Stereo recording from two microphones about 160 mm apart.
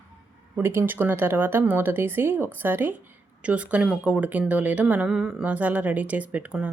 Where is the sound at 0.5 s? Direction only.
15° right (ahead or behind).